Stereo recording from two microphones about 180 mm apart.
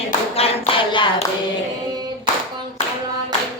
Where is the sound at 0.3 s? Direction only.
35° left (ahead or behind).